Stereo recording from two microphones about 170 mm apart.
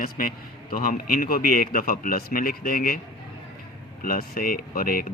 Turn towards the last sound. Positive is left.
turn(degrees=60)  # may be behind; listen again after turning